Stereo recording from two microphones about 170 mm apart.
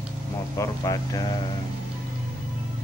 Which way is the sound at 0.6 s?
20° left (ahead or behind).